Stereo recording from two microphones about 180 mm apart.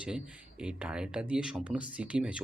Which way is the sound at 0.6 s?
5° right (ahead or behind).